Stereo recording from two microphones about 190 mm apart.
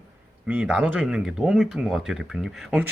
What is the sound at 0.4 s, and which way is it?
Speech, 5° right (ahead or behind).